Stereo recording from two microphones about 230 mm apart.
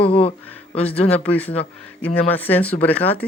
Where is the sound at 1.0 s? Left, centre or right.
Centre.